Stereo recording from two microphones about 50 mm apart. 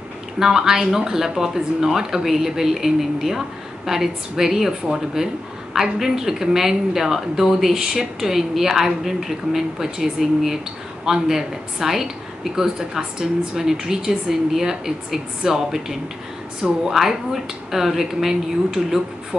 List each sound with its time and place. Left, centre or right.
0.4 s speech: centre